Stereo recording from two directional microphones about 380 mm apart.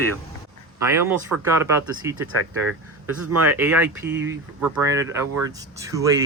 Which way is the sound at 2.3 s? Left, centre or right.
Right.